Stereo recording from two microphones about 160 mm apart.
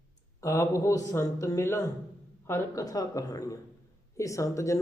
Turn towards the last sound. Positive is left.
turn(degrees=20)  # may be behind; listen again after turning